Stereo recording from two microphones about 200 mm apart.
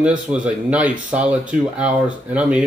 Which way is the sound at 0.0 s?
5° right (ahead or behind).